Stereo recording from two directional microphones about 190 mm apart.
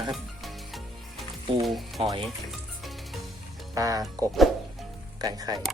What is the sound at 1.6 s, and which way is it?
Speech, centre (ahead or behind).